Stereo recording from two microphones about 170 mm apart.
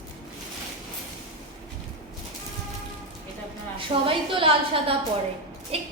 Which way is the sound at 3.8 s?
30° right (ahead or behind).